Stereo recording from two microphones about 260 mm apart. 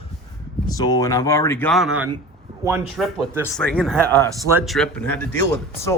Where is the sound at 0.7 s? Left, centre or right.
Centre.